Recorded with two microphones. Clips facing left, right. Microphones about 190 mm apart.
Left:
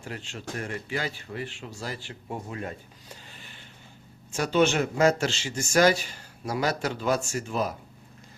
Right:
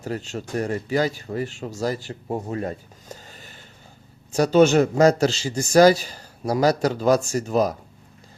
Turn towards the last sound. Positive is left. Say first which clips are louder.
# right 8 dB
turn(degrees=-40)  # may be behind; listen again after turning